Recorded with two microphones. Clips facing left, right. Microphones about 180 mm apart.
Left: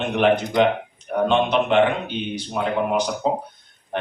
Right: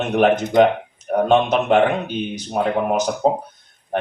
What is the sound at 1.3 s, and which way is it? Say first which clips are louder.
Speech: right 4 dB; 45° right (ahead or behind).